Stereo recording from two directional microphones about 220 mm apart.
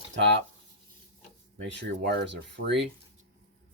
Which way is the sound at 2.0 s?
45° right (ahead or behind).